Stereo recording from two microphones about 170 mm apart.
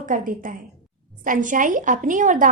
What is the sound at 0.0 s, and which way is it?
A woman's voice, 55° right (ahead or behind).